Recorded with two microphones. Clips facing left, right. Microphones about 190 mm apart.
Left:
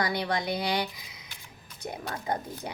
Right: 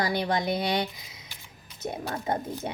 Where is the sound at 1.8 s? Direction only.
25° right (ahead or behind).